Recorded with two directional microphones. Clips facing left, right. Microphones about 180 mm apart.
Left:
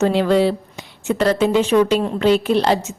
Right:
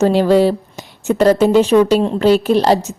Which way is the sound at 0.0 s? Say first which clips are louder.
Right 4 dB; 40° right (ahead or behind).